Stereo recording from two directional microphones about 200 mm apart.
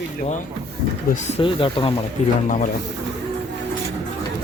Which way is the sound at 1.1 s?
35° left (ahead or behind).